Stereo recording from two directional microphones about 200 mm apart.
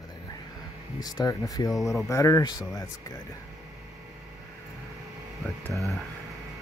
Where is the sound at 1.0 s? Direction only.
20° left (ahead or behind).